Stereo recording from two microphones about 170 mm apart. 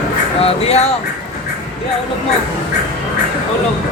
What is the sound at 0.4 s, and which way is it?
Speech, 35° left (ahead or behind).